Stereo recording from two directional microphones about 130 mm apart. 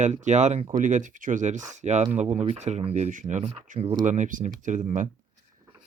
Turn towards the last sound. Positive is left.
turn(degrees=-75)  # may be behind; listen again after turning